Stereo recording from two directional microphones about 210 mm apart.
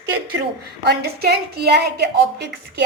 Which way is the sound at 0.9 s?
50° right (ahead or behind).